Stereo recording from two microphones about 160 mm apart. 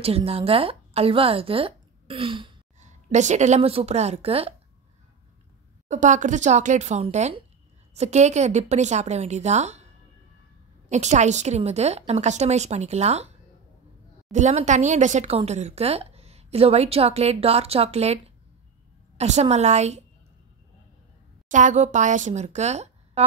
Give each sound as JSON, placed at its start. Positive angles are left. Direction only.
{"t": 0.0, "sound": "speech", "side_deg": -40}
{"t": 2.8, "sound": "a woman's voice", "side_deg": -45}
{"t": 5.9, "sound": "a woman's voice", "side_deg": -50}
{"t": 10.9, "sound": "a woman's voice", "side_deg": -45}
{"t": 14.3, "sound": "a woman's voice", "side_deg": -45}
{"t": 21.5, "sound": "speech", "side_deg": -50}